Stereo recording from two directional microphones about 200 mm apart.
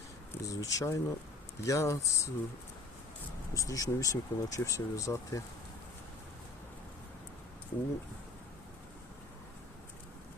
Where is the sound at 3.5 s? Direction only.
15° left (ahead or behind).